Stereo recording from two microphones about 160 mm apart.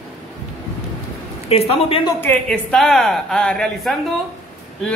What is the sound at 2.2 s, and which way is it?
A woman's voice, 10° left (ahead or behind).